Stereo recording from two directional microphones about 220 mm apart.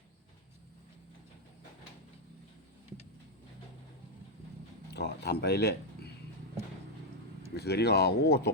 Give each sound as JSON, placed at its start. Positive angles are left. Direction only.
{"t": 4.9, "sound": "speech", "side_deg": 50}
{"t": 7.5, "sound": "speech", "side_deg": 50}